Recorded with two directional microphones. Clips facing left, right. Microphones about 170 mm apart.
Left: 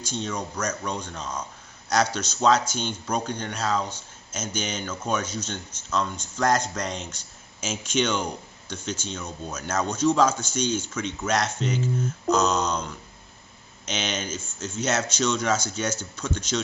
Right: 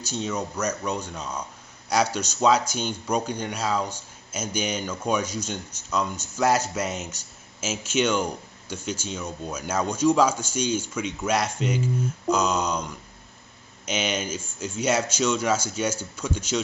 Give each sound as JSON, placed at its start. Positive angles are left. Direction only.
{"t": 0.0, "sound": "speech", "side_deg": -10}